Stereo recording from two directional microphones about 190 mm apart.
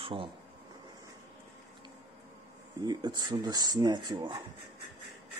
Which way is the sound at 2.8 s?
20° right (ahead or behind).